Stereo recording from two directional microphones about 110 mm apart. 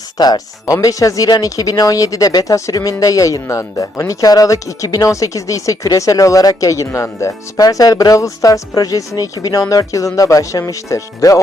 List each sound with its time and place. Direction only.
0.2 s speech: 35° left (ahead or behind)